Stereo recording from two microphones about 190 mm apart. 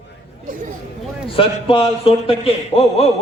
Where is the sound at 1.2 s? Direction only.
30° left (ahead or behind).